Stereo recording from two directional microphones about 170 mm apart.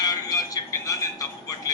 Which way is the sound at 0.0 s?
20° left (ahead or behind).